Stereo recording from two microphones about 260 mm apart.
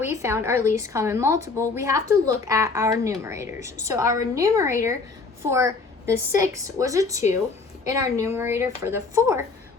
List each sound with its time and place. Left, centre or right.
0.0 s a woman's voice: centre